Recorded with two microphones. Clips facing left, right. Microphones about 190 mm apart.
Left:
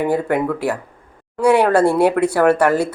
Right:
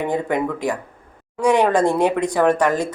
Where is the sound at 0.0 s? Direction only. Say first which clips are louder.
Left 3 dB; 10° left (ahead or behind).